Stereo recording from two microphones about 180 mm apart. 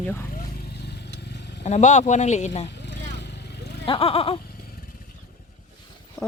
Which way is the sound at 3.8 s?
30° left (ahead or behind).